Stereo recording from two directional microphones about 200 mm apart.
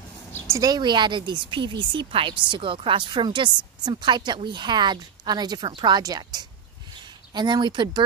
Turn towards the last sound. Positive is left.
turn(degrees=-20)  # may be behind; listen again after turning